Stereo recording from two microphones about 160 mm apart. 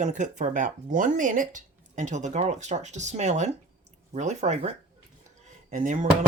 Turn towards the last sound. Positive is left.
turn(degrees=-50)  # may be behind; listen again after turning